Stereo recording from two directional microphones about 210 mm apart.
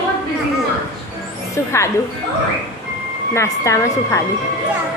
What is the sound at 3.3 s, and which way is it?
Speech, 15° left (ahead or behind).